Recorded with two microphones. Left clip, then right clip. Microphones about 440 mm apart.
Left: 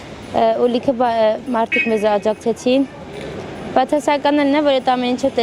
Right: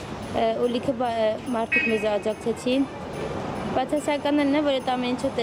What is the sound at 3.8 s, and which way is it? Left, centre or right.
Speech, left.